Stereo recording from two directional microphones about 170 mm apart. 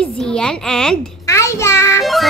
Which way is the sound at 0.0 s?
5° left (ahead or behind).